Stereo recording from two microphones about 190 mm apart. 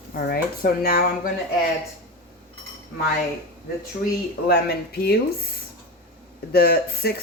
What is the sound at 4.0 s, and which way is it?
Speech, 55° left (ahead or behind).